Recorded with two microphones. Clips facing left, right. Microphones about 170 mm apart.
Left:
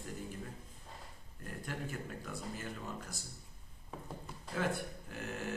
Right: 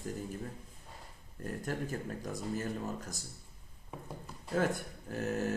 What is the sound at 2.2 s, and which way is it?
Speech, 40° right (ahead or behind).